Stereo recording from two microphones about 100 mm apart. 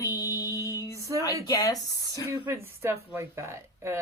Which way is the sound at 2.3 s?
25° right (ahead or behind).